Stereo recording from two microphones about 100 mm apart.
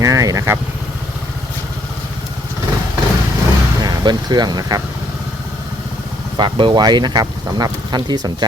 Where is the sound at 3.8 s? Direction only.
45° right (ahead or behind).